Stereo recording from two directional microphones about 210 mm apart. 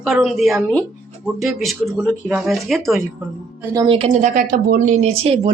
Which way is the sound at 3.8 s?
25° right (ahead or behind).